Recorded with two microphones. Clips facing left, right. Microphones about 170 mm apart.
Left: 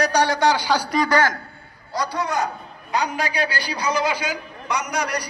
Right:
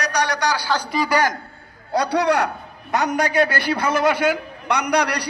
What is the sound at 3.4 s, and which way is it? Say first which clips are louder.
A man's voice: right 6 dB; 55° right (ahead or behind).